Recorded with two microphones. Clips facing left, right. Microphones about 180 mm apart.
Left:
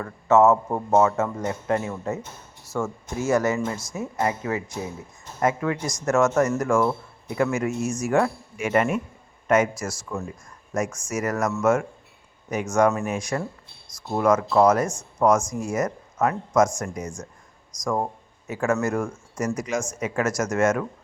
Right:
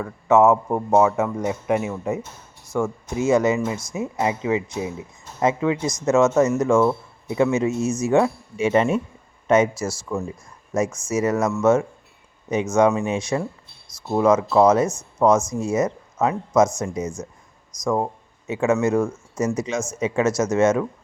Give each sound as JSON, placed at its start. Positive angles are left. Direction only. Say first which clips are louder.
{"t": 0.0, "sound": "a man's voice", "louder": "right 1 dB", "side_deg": -15}
{"t": 12.7, "sound": "a man's voice", "louder": "right 2 dB", "side_deg": -15}
{"t": 16.6, "sound": "speech", "louder": "right 2 dB", "side_deg": -5}
{"t": 16.8, "sound": "a man's voice", "louder": "right 5 dB", "side_deg": -20}
{"t": 17.7, "sound": "speech", "louder": "right 3 dB", "side_deg": 0}
{"t": 18.4, "sound": "a man's voice", "louder": "right 4 dB", "side_deg": -20}